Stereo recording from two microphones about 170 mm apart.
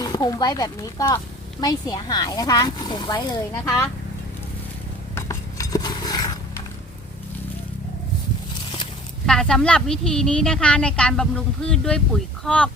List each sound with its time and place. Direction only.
0.0 s speech: 20° left (ahead or behind)
5.1 s a sound: 20° left (ahead or behind)
9.2 s a woman's voice: 5° left (ahead or behind)